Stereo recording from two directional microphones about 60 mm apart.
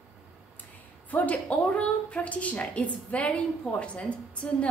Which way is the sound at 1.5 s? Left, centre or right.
Centre.